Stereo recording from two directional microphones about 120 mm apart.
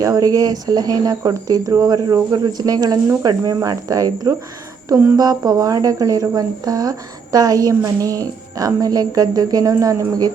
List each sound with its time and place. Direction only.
0.0 s speech: 30° right (ahead or behind)